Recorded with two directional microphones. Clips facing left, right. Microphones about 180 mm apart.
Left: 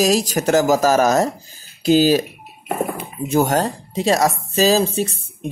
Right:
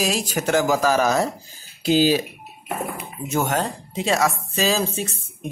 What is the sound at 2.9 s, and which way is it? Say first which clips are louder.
Speech: left 7 dB; 30° left (ahead or behind).